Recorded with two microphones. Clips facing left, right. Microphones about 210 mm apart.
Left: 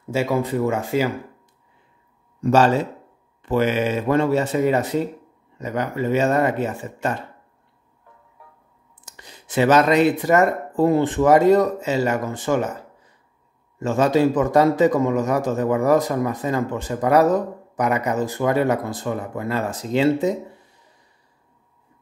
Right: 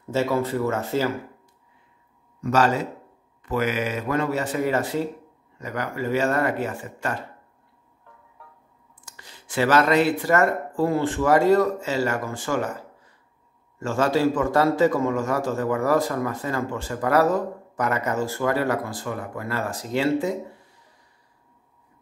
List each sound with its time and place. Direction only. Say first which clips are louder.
0.1 s speech: left 2 dB; 15° left (ahead or behind)
2.4 s a man's voice: left 4 dB; 30° left (ahead or behind)
9.0 s a man's voice: left 3 dB; 20° left (ahead or behind)